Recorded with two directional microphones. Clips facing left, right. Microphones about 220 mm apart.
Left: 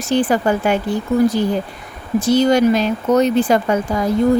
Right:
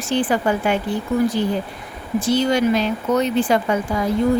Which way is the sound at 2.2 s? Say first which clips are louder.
Left 4 dB; 40° left (ahead or behind).